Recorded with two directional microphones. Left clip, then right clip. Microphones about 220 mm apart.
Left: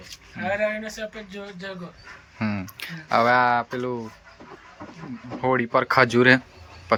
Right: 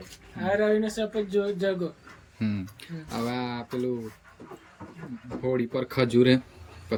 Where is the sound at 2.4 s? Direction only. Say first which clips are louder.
Left 5 dB; 5° right (ahead or behind).